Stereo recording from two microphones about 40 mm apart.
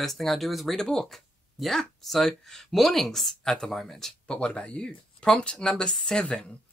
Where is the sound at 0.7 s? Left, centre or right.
Centre.